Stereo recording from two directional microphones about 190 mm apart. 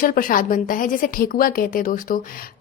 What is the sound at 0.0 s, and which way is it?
A woman's voice, 45° left (ahead or behind).